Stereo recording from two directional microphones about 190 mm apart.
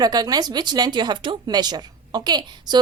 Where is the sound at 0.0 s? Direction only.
20° right (ahead or behind).